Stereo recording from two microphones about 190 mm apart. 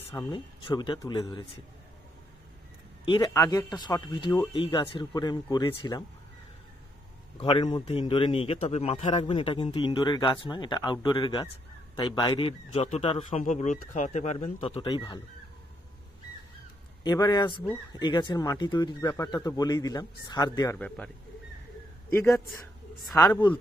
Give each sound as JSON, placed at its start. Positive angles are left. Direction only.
{"t": 0.1, "sound": "a man's voice", "side_deg": 20}
{"t": 3.1, "sound": "a man's voice", "side_deg": 20}
{"t": 7.3, "sound": "a man's voice", "side_deg": 25}
{"t": 17.0, "sound": "a man's voice", "side_deg": 20}
{"t": 20.8, "sound": "speech", "side_deg": 5}
{"t": 22.1, "sound": "speech", "side_deg": 15}